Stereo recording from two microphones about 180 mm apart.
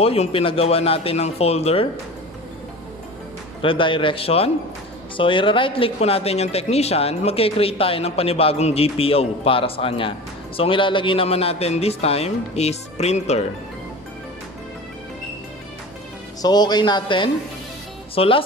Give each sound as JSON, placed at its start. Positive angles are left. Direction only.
{"t": 0.0, "sound": "speech", "side_deg": 35}
{"t": 3.6, "sound": "a man's voice", "side_deg": 30}
{"t": 16.3, "sound": "a man's voice", "side_deg": 20}